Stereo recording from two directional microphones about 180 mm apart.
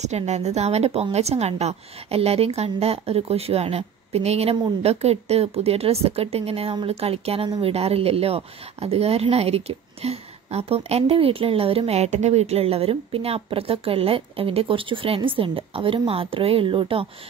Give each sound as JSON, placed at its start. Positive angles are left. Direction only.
{"t": 0.0, "sound": "a woman's voice", "side_deg": -40}